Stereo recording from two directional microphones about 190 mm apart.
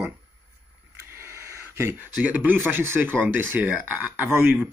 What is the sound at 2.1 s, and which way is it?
Speech, 10° right (ahead or behind).